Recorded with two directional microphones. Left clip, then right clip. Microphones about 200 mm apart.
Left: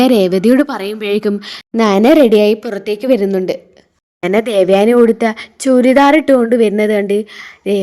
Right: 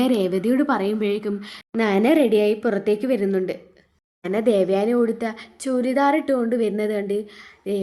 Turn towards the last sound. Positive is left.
turn(degrees=35)  # may be behind; listen again after turning